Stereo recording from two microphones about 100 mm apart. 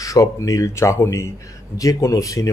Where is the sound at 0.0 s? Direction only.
35° left (ahead or behind).